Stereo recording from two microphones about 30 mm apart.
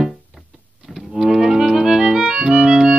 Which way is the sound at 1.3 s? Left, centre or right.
Centre.